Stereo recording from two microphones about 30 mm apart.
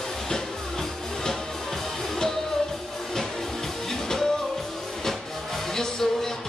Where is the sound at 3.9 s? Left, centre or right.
Centre.